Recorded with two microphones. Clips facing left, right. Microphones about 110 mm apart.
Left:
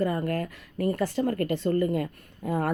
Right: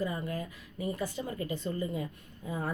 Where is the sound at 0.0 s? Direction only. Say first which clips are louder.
Left 7 dB; 60° left (ahead or behind).